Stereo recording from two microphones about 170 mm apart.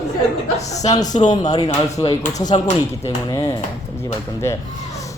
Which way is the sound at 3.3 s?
20° left (ahead or behind).